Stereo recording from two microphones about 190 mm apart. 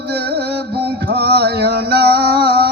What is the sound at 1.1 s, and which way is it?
Music, 55° right (ahead or behind).